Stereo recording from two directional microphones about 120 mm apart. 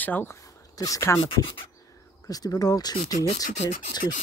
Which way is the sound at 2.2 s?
30° left (ahead or behind).